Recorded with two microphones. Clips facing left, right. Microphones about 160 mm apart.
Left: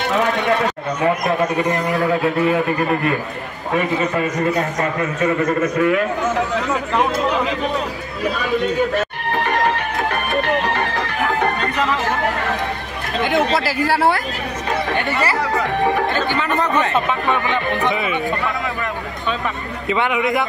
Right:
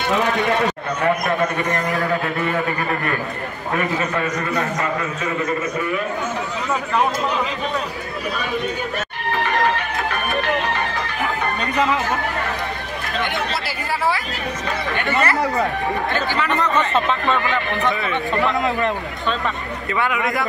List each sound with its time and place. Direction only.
5.8 s speech: 75° left (ahead or behind)
13.7 s speech: 85° left; by 14.2 s 65° left (ahead or behind)
17.3 s speech: 20° left (ahead or behind)
19.9 s speech: 20° left (ahead or behind)